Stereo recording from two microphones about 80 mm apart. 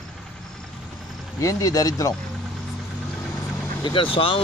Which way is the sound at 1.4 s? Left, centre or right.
Left.